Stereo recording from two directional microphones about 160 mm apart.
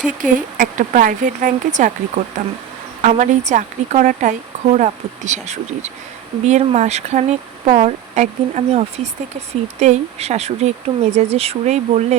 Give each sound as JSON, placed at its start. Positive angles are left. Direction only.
{"t": 0.2, "sound": "speech", "side_deg": -55}